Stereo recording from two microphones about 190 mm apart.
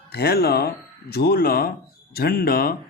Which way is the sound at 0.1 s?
55° left (ahead or behind).